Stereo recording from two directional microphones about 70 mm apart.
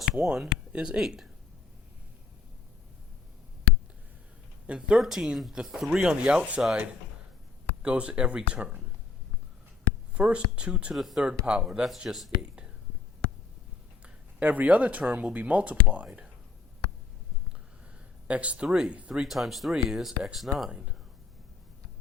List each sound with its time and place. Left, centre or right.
0.0 s a sound: centre
0.7 s speech: centre
4.6 s speech: centre
4.9 s speech: centre
7.8 s speech: centre
10.2 s speech: centre
10.9 s speech: centre
14.0 s speech: right
18.3 s speech: centre
19.2 s speech: centre